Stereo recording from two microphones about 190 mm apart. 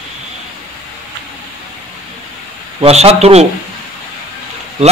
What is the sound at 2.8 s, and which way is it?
Speech, 35° right (ahead or behind).